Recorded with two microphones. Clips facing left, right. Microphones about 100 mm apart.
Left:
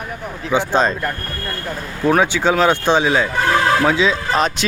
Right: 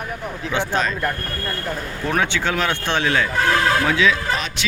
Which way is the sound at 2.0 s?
15° left (ahead or behind).